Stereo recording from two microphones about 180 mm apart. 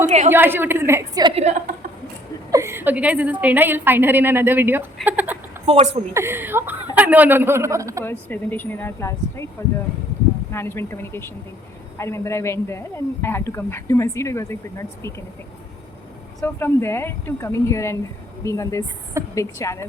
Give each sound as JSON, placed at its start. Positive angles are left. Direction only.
{"t": 0.0, "sound": "a woman's voice", "side_deg": -40}
{"t": 0.3, "sound": "a woman's voice", "side_deg": -10}
{"t": 1.4, "sound": "a woman's voice", "side_deg": -40}
{"t": 2.5, "sound": "a woman's voice", "side_deg": -15}
{"t": 5.0, "sound": "a sound", "side_deg": -10}
{"t": 5.6, "sound": "a woman's voice", "side_deg": -30}
{"t": 6.1, "sound": "a woman's voice", "side_deg": -15}
{"t": 8.0, "sound": "speech", "side_deg": 10}
{"t": 10.5, "sound": "speech", "side_deg": 15}
{"t": 16.4, "sound": "speech", "side_deg": 15}